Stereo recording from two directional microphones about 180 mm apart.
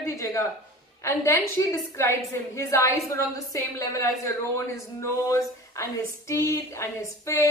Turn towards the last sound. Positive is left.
turn(degrees=15)  # may be behind; listen again after turning